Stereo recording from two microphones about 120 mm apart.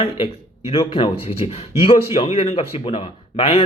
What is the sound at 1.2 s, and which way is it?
Speech, 60° left (ahead or behind).